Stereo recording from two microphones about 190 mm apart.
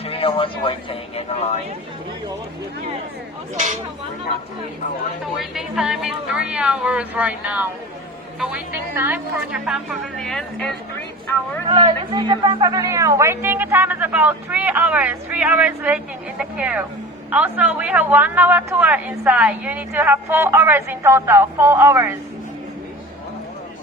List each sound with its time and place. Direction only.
0.0 s speech: 30° left (ahead or behind)
5.4 s a woman's voice: centre (ahead or behind)
11.7 s a woman's voice: 25° right (ahead or behind)